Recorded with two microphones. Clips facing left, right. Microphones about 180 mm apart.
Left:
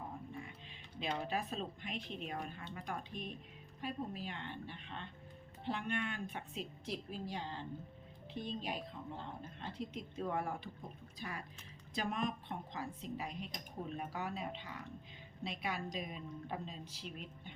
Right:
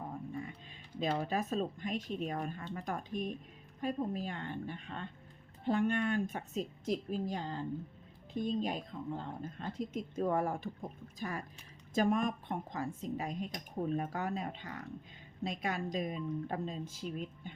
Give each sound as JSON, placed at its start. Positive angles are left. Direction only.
{"t": 0.9, "sound": "speech", "side_deg": -40}